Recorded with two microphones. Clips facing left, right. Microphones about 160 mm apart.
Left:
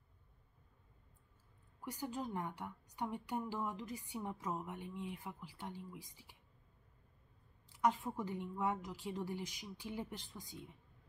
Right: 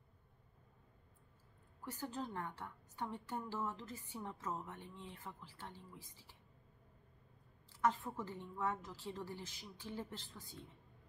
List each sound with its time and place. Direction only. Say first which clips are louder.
1.9 s a woman's voice: left 2 dB; 15° left (ahead or behind)
7.7 s a woman's voice: left 2 dB; 15° left (ahead or behind)